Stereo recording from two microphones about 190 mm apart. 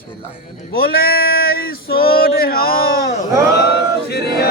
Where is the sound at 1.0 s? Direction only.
55° left (ahead or behind).